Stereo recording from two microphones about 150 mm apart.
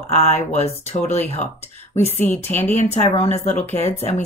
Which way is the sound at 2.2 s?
15° left (ahead or behind).